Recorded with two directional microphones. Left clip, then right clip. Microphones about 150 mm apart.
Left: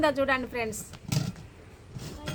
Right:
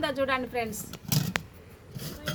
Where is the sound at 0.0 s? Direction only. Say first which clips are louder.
Left 3 dB; 55° left (ahead or behind).